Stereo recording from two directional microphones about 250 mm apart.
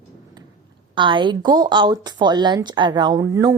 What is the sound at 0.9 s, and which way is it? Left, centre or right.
Speech, centre.